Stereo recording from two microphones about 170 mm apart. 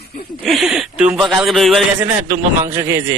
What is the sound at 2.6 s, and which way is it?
Speech, 15° right (ahead or behind).